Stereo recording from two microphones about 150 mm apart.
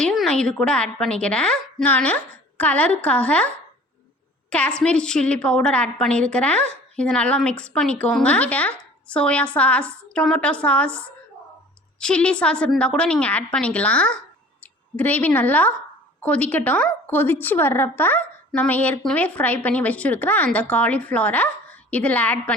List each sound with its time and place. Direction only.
0.0 s a woman's voice: centre (ahead or behind)